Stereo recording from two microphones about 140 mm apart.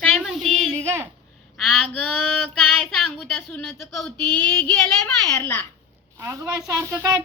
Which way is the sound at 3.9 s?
5° left (ahead or behind).